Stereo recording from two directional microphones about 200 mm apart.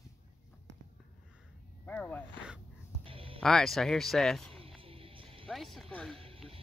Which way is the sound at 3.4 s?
Centre (ahead or behind).